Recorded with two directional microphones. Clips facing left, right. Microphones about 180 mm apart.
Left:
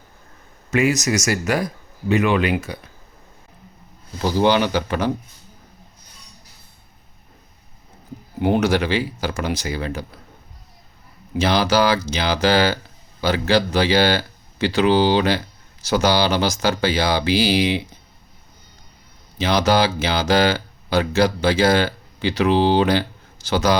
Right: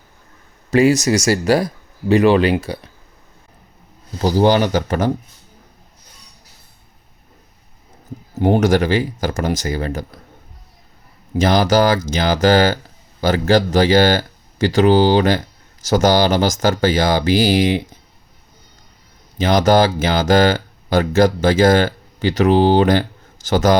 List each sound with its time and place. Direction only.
0.7 s speech: 30° right (ahead or behind)
4.2 s speech: 40° right (ahead or behind)
8.4 s speech: 40° right (ahead or behind)
11.3 s speech: 45° right (ahead or behind)
19.4 s speech: 45° right (ahead or behind)